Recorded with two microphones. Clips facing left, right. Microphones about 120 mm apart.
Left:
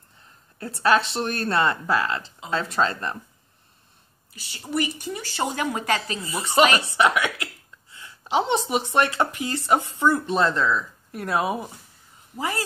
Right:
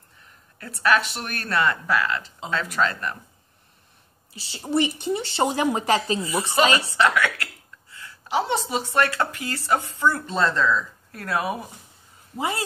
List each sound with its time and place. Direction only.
0.6 s speech: 30° left (ahead or behind)
4.3 s speech: 25° right (ahead or behind)
6.6 s a woman's voice: 25° left (ahead or behind)
12.4 s speech: 20° right (ahead or behind)